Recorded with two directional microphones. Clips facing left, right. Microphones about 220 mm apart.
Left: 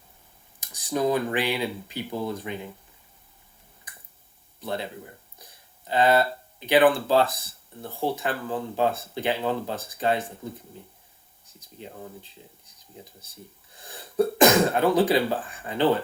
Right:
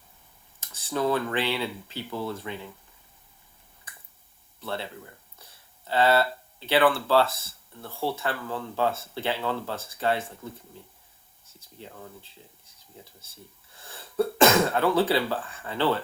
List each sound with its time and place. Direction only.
0.6 s speech: 15° left (ahead or behind)
3.9 s finger snapping: 15° left (ahead or behind)
4.6 s speech: 15° left (ahead or behind)
11.8 s speech: 20° left (ahead or behind)